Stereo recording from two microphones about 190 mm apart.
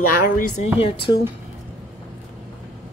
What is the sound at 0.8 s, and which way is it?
Speech, 25° left (ahead or behind).